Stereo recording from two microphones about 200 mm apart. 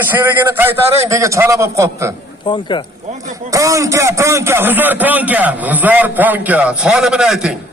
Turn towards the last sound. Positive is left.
turn(degrees=-5)  # may be behind; listen again after turning